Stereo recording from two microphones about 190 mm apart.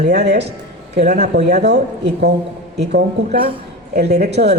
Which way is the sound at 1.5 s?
60° right (ahead or behind).